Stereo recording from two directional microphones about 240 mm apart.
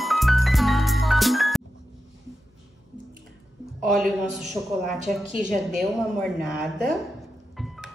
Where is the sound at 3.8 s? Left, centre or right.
Centre.